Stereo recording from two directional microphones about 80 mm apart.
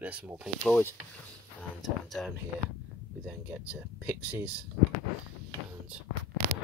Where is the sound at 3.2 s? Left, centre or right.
Centre.